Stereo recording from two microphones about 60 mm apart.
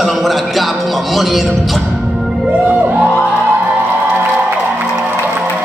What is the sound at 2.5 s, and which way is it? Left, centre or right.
Music, right.